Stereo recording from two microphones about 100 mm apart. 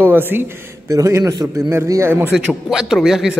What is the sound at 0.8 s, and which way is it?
Speech, 30° right (ahead or behind).